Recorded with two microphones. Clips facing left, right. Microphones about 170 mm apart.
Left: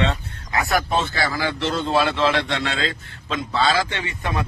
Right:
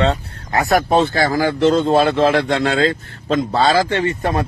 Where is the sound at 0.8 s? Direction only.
60° right (ahead or behind).